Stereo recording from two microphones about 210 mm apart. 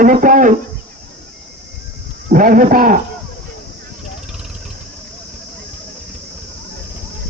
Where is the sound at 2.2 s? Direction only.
40° right (ahead or behind).